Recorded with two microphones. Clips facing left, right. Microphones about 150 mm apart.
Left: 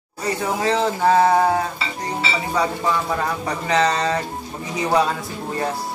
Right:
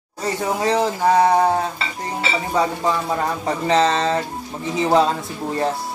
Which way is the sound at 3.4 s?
30° right (ahead or behind).